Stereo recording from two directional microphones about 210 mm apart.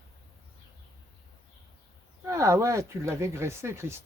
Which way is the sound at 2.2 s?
15° right (ahead or behind).